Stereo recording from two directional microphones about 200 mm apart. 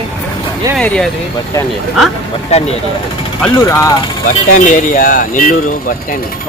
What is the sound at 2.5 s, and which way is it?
Speech, 35° left (ahead or behind).